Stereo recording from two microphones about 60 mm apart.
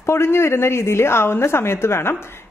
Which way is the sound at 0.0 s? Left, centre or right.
Left.